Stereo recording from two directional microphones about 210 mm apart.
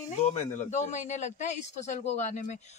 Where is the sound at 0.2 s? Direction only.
30° left (ahead or behind).